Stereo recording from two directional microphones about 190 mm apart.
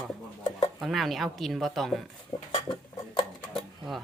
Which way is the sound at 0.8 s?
Centre (ahead or behind).